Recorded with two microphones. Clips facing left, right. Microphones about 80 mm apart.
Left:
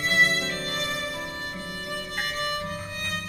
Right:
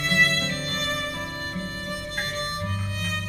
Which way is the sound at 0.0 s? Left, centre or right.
Left.